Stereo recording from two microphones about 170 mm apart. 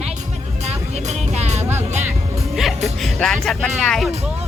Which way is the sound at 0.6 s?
40° right (ahead or behind).